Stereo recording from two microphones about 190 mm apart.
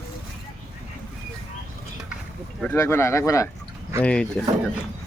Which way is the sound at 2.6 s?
10° left (ahead or behind).